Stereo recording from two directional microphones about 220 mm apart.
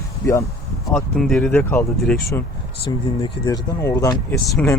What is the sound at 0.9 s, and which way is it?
Speech, centre (ahead or behind).